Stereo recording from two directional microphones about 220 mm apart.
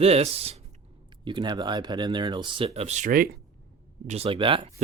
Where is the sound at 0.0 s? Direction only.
25° right (ahead or behind).